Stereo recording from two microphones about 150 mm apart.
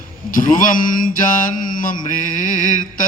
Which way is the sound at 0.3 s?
65° left (ahead or behind).